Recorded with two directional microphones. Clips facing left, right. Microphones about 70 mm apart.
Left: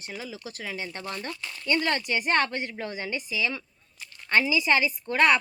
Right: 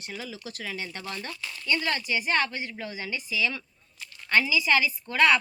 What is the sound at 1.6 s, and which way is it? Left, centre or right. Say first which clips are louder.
Speech: left 2 dB; left.